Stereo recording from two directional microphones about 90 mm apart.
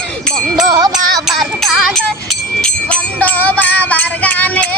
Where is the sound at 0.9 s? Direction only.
5° right (ahead or behind).